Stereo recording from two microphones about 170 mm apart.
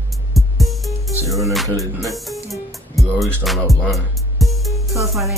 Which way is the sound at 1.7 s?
20° left (ahead or behind).